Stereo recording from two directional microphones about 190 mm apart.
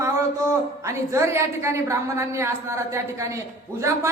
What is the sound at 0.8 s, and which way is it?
A woman's voice, 15° right (ahead or behind).